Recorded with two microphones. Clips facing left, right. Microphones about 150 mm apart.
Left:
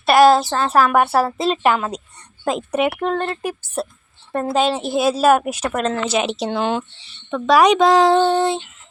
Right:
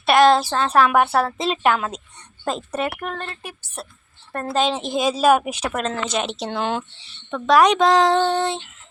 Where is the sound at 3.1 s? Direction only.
40° left (ahead or behind).